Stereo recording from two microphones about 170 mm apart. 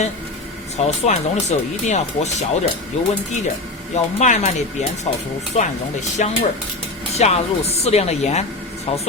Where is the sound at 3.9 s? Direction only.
45° left (ahead or behind).